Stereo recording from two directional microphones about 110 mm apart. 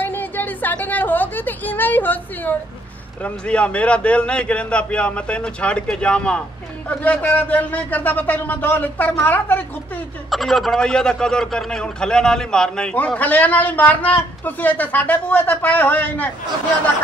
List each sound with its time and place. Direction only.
0.0 s a sound: 15° left (ahead or behind)
3.3 s speech: 10° left (ahead or behind)
10.3 s speech: centre (ahead or behind)